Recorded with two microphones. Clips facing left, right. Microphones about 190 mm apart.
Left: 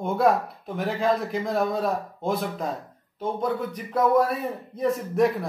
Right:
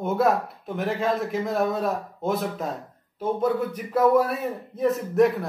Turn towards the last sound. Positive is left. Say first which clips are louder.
# right 2 dB
turn(degrees=0)  # may be behind; listen again after turning